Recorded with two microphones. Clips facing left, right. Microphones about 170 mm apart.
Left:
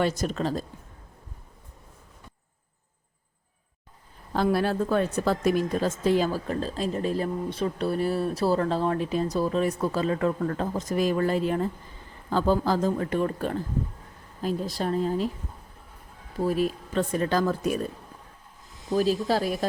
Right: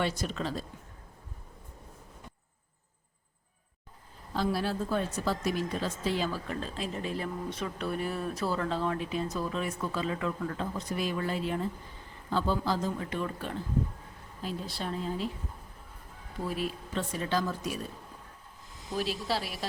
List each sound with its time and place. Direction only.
0.0 s speech: 45° left (ahead or behind)
4.3 s a woman's voice: 55° left (ahead or behind)
16.4 s speech: 45° left (ahead or behind)
18.9 s speech: 40° left (ahead or behind)